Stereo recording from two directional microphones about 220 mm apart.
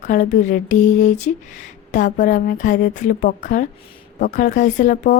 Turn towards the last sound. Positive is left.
turn(degrees=40)  # may be behind; listen again after turning